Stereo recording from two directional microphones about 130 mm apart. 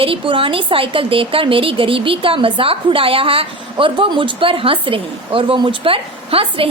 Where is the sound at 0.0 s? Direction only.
45° right (ahead or behind).